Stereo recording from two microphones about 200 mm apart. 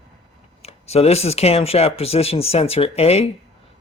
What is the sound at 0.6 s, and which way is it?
Speech, 30° left (ahead or behind).